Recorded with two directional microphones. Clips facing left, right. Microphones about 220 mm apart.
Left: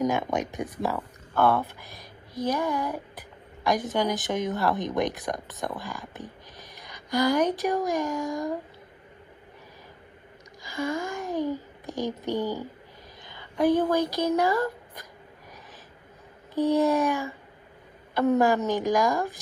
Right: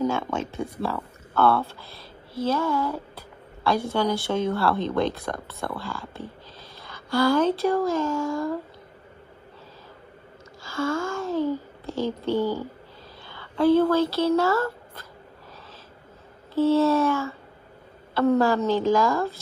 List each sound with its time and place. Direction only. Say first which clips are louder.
0.0 s speech: even; 15° left (ahead or behind)
10.6 s speech: right 3 dB; 15° left (ahead or behind)
16.5 s speech: right 3 dB; 15° left (ahead or behind)